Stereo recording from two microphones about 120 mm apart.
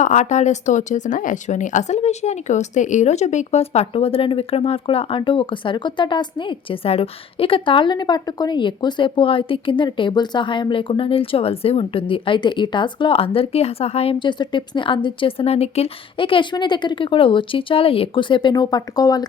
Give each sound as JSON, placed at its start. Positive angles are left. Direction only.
{"t": 0.0, "sound": "speech", "side_deg": 90}